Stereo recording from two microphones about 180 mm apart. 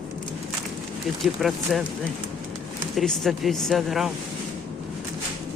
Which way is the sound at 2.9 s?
Centre (ahead or behind).